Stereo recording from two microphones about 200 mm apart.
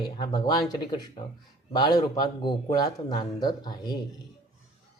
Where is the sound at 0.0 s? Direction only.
25° left (ahead or behind).